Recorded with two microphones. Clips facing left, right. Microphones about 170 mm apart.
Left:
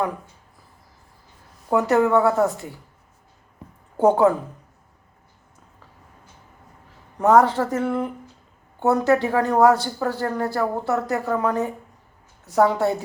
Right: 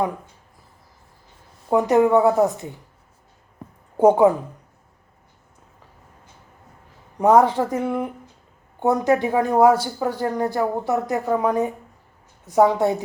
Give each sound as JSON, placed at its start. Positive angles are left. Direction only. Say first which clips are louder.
{"t": 1.7, "sound": "speech", "louder": "right 2 dB", "side_deg": -15}
{"t": 3.9, "sound": "a woman's voice", "louder": "right 2 dB", "side_deg": -15}
{"t": 7.2, "sound": "speech", "louder": "right 1 dB", "side_deg": -15}